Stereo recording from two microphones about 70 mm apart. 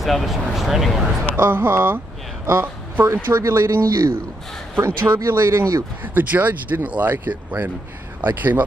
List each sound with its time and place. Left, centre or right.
0.0 s speech: centre
1.3 s speech: right
3.1 s speech: right
6.1 s speech: right